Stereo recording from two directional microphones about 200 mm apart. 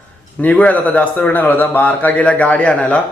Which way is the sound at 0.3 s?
5° left (ahead or behind).